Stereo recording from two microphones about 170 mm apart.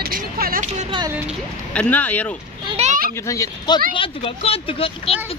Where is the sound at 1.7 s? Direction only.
10° left (ahead or behind).